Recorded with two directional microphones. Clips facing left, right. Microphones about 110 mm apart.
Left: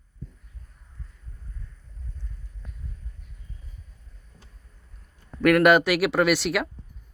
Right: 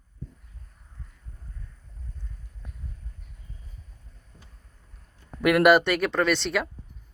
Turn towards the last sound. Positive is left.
turn(degrees=5)  # may be behind; listen again after turning